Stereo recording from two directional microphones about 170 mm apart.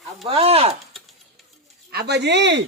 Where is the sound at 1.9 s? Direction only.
75° right (ahead or behind); by 2.6 s 90° right.